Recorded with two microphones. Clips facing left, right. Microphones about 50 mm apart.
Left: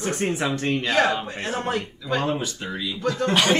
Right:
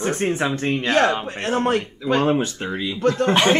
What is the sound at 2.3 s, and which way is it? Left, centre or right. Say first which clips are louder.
Speech: right 6 dB; right.